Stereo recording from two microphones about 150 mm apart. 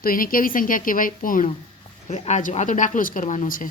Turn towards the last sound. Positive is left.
turn(degrees=65)  # may be behind; listen again after turning